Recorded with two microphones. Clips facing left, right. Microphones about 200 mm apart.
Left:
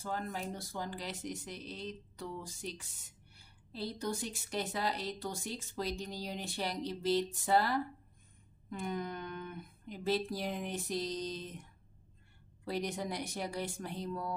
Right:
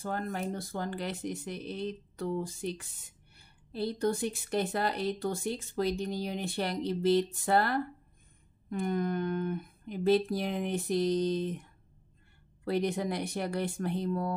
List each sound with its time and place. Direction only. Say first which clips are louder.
0.0 s speech: right 5 dB; 55° right (ahead or behind)
12.6 s speech: right 7 dB; 60° right (ahead or behind)